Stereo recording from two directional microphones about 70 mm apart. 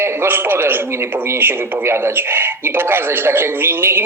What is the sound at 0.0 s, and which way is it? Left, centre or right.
Speech, right.